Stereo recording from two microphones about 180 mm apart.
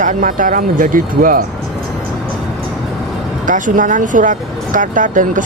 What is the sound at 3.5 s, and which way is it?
Speech, 45° right (ahead or behind).